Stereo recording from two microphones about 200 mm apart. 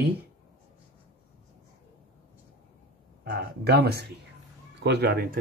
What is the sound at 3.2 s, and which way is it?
Speech, 50° right (ahead or behind).